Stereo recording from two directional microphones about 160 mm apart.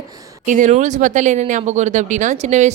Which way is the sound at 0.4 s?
50° right (ahead or behind).